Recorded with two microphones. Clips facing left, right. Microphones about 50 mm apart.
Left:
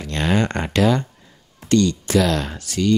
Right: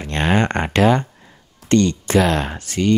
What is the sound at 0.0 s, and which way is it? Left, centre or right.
Speech, right.